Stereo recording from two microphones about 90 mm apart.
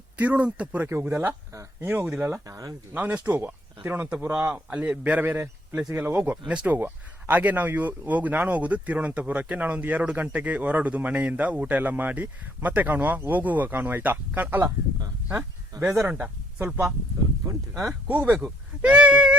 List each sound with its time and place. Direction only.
0.2 s speech: 15° right (ahead or behind)
2.5 s speech: 40° right (ahead or behind)
2.9 s speech: 20° right (ahead or behind)
15.8 s speech: 15° right (ahead or behind)
18.1 s speech: 20° right (ahead or behind)